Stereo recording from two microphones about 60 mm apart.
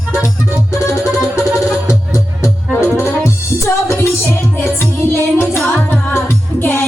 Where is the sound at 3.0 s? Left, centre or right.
Left.